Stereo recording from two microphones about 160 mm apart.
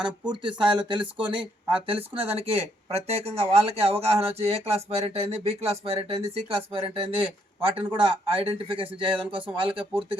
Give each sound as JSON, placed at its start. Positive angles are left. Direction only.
{"t": 0.0, "sound": "speech", "side_deg": -30}